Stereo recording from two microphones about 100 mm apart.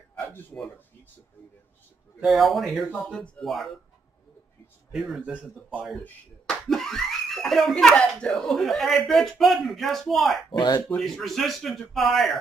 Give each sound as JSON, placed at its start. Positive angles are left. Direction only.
{"t": 0.1, "sound": "a sound", "side_deg": 20}
{"t": 2.2, "sound": "speech", "side_deg": 0}
{"t": 4.9, "sound": "speech", "side_deg": -5}
{"t": 5.3, "sound": "speech", "side_deg": -15}
{"t": 6.4, "sound": "speech", "side_deg": 5}